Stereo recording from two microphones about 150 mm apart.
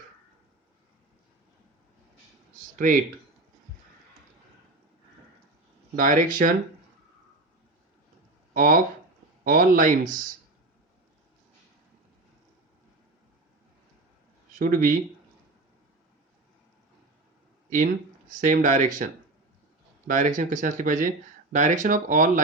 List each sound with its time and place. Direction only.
2.7 s speech: 60° right (ahead or behind)
6.0 s speech: 65° right (ahead or behind)
8.5 s speech: 65° right (ahead or behind)
14.6 s speech: 65° right (ahead or behind)
18.3 s speech: 60° right (ahead or behind)